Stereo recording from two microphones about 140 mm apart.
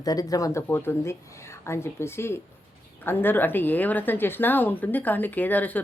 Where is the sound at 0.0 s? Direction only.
25° left (ahead or behind).